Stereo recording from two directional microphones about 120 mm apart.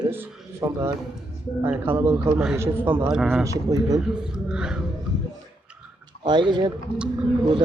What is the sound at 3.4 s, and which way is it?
Speech, 30° right (ahead or behind).